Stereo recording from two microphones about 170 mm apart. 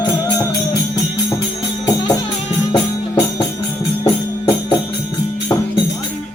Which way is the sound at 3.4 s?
25° left (ahead or behind).